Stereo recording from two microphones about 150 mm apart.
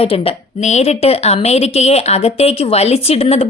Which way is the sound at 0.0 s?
40° left (ahead or behind).